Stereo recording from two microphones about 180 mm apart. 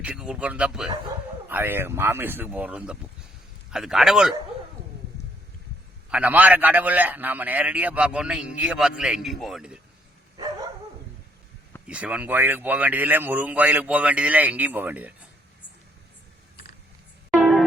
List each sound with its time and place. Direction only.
0.0 s a man's voice: 5° right (ahead or behind)
6.1 s a man's voice: 10° right (ahead or behind)
11.9 s a man's voice: 5° right (ahead or behind)
17.3 s music: centre (ahead or behind)